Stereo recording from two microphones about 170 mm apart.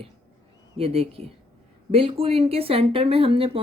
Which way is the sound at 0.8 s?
35° right (ahead or behind).